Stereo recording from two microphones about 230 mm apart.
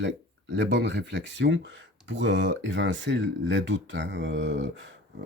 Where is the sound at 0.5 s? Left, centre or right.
Right.